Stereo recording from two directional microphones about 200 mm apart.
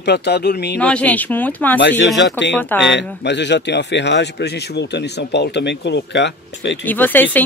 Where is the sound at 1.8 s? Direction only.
60° left (ahead or behind).